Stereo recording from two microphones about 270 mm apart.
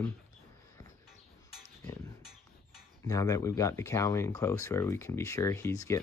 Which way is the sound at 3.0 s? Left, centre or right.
Centre.